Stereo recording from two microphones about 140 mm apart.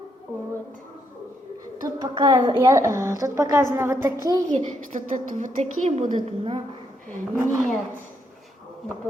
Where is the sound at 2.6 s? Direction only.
20° right (ahead or behind).